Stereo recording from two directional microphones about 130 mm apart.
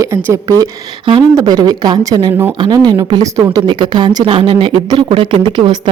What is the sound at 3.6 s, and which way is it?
A woman's voice, 35° right (ahead or behind).